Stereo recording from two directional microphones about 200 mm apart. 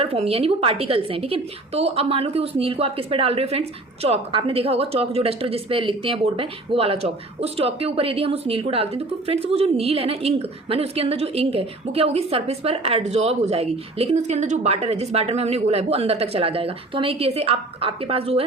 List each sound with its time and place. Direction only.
0.0 s speech: 30° right (ahead or behind)